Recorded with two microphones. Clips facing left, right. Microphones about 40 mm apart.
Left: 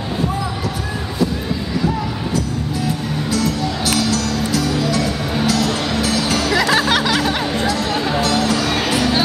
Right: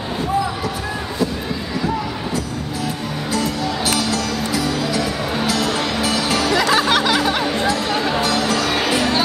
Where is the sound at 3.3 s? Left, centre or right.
Centre.